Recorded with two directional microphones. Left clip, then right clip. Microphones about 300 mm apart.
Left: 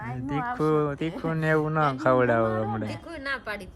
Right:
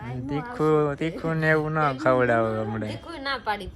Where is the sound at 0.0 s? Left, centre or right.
Centre.